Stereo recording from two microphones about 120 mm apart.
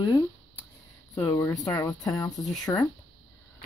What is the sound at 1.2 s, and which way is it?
Speech, 25° left (ahead or behind).